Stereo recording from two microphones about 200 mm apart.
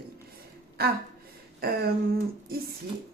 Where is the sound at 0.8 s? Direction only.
50° right (ahead or behind).